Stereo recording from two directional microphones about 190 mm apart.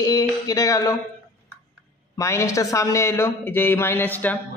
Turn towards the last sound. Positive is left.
turn(degrees=10)  # may be behind; listen again after turning